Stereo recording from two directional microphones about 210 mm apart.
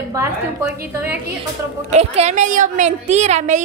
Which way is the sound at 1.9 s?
30° right (ahead or behind).